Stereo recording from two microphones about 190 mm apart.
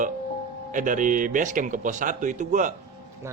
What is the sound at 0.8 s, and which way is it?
Speech, 45° right (ahead or behind).